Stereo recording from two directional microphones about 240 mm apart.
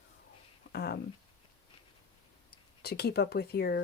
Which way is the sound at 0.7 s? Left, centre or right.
Left.